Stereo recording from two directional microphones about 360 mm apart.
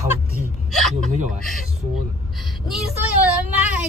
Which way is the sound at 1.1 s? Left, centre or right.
Right.